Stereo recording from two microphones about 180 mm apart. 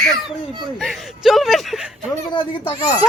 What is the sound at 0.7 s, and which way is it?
A woman's voice, centre (ahead or behind).